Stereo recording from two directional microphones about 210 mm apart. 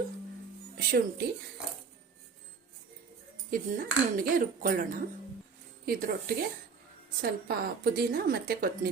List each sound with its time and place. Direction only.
0.8 s a woman's voice: 45° right (ahead or behind)
3.5 s a woman's voice: 40° right (ahead or behind)